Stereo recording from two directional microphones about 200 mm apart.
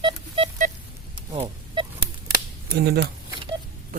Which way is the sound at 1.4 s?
25° right (ahead or behind).